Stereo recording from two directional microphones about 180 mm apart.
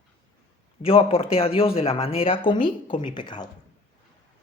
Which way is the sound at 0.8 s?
30° left (ahead or behind).